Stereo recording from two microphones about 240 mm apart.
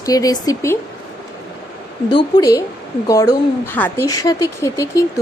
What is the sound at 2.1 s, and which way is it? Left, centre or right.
A woman's voice, centre.